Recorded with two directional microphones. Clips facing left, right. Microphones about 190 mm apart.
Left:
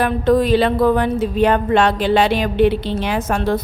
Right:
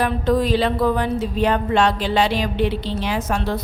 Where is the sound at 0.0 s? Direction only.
55° left (ahead or behind).